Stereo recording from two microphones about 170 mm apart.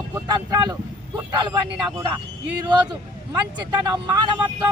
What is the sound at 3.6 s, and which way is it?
Speech, 25° right (ahead or behind).